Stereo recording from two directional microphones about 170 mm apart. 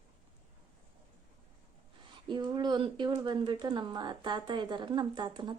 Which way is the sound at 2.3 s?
25° right (ahead or behind).